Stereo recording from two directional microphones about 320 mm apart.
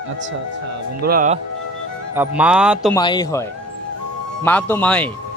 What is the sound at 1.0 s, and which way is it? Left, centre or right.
Speech, right.